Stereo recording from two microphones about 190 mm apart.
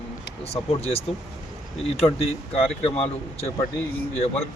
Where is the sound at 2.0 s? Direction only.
30° left (ahead or behind).